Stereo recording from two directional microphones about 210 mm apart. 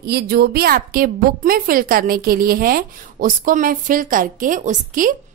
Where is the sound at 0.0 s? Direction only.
50° right (ahead or behind).